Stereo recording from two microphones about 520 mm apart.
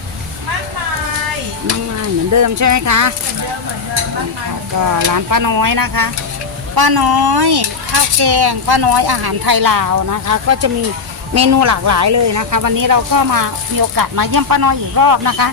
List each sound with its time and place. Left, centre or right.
2.3 s speech: right
5.1 s speech: right